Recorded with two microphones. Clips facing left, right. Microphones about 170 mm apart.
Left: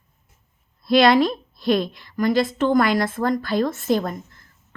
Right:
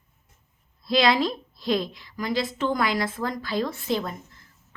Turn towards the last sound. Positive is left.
turn(degrees=45)  # may be behind; listen again after turning